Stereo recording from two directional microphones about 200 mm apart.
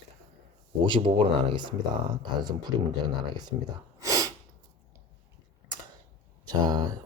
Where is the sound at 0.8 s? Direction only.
25° right (ahead or behind).